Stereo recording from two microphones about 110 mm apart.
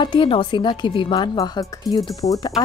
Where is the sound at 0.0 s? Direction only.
50° left (ahead or behind).